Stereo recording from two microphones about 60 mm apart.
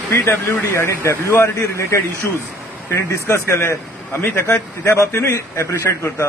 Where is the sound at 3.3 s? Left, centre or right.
Left.